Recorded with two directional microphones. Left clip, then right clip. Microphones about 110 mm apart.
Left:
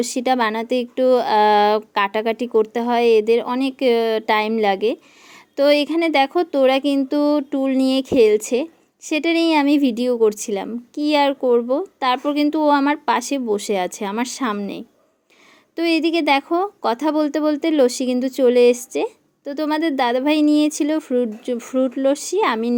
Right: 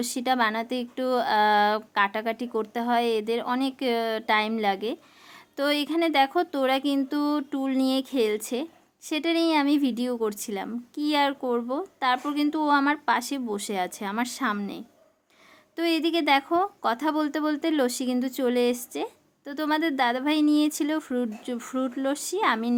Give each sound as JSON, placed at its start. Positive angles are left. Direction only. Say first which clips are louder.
{"t": 0.0, "sound": "speech", "louder": "left 6 dB", "side_deg": 35}
{"t": 15.7, "sound": "speech", "louder": "left 6 dB", "side_deg": 30}